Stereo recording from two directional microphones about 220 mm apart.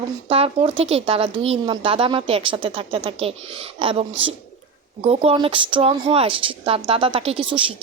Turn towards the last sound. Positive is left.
turn(degrees=-25)  # may be behind; listen again after turning